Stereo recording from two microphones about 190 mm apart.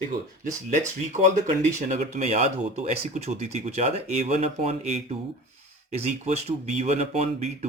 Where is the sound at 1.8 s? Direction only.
40° right (ahead or behind).